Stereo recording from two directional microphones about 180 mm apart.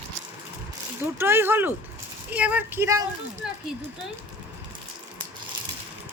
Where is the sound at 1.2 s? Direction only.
15° right (ahead or behind).